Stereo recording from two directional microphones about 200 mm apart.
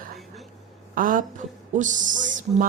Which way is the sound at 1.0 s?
40° right (ahead or behind).